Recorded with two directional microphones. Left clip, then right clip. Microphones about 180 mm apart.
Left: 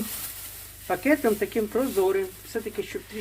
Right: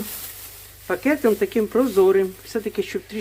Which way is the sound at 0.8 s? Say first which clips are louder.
Right 3 dB; 25° right (ahead or behind).